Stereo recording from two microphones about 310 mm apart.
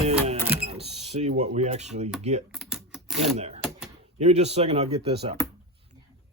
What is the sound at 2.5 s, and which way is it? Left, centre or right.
Typing, centre.